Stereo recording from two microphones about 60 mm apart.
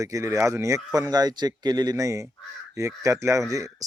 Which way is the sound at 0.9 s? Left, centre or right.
Right.